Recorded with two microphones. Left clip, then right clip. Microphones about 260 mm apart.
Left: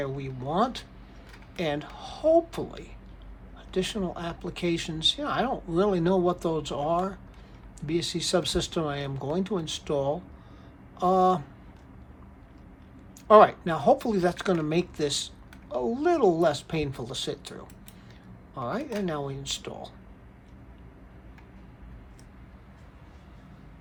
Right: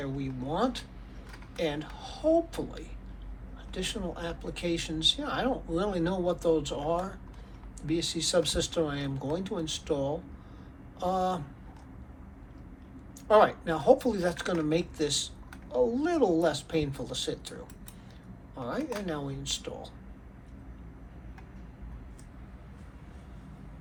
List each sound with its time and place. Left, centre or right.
0.0 s a man's voice: left
13.2 s a man's voice: left
18.6 s a man's voice: left